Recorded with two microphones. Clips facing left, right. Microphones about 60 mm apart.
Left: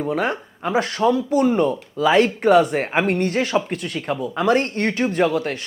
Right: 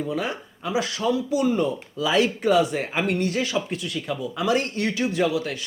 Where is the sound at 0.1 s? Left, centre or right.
Left.